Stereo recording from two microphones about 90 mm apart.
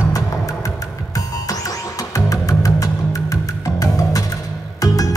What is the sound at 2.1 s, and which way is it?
Music, 40° left (ahead or behind).